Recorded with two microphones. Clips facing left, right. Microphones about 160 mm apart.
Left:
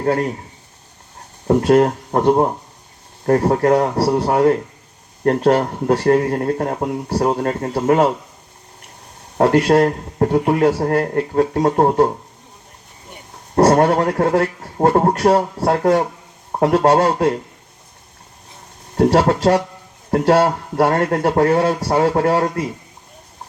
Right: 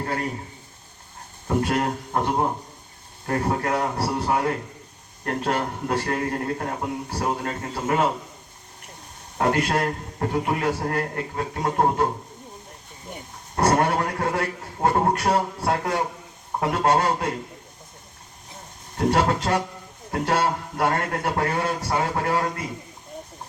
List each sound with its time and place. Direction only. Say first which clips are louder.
0.0 s speech: left 10 dB; 45° left (ahead or behind)
1.5 s speech: left 10 dB; 45° left (ahead or behind)
9.4 s speech: left 9 dB; 35° left (ahead or behind)
13.7 s speech: left 5 dB; 50° left (ahead or behind)
18.9 s speech: left 7 dB; 40° left (ahead or behind)